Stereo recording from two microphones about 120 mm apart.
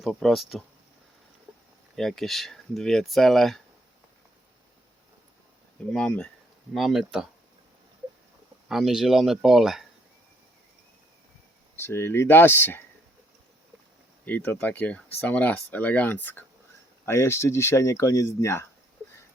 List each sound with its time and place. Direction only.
0.0 s speech: centre (ahead or behind)
2.0 s speech: centre (ahead or behind)
5.9 s speech: 5° left (ahead or behind)
8.7 s speech: centre (ahead or behind)
11.8 s speech: 20° left (ahead or behind)
14.3 s speech: 15° left (ahead or behind)